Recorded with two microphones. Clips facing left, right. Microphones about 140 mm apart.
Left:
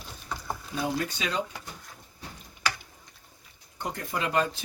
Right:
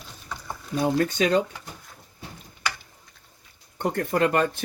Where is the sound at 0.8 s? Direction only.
50° right (ahead or behind).